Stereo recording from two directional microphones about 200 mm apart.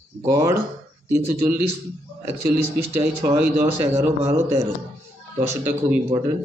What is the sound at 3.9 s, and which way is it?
Speech, 35° right (ahead or behind).